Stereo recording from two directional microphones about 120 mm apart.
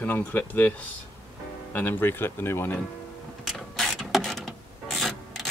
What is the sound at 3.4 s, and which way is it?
Mechanisms, centre (ahead or behind).